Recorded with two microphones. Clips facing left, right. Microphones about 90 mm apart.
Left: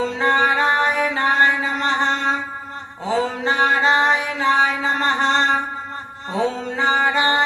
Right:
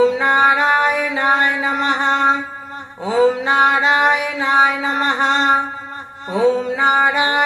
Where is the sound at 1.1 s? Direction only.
20° right (ahead or behind).